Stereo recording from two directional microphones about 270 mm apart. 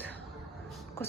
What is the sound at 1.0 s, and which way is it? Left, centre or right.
Speech, centre.